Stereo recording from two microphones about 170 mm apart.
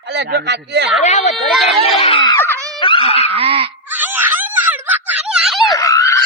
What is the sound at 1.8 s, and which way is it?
Speech, 35° left (ahead or behind).